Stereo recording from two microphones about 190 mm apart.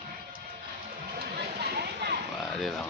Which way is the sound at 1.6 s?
60° right (ahead or behind).